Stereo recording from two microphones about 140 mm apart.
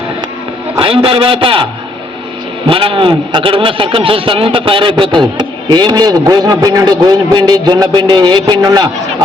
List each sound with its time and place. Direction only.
0.8 s a man's voice: 40° right (ahead or behind)
2.6 s a man's voice: 40° right (ahead or behind)